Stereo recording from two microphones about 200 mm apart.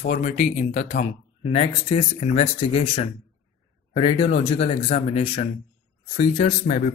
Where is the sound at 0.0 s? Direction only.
40° left (ahead or behind).